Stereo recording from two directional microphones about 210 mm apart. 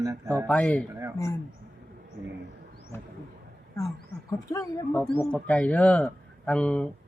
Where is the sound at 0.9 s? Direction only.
10° right (ahead or behind).